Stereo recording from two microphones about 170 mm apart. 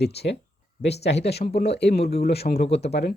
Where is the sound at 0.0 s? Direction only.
75° left (ahead or behind).